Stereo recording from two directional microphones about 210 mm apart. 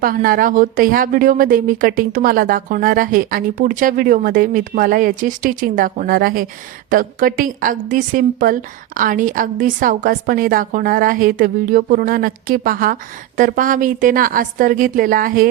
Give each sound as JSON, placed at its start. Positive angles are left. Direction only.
{"t": 0.0, "sound": "speech", "side_deg": -45}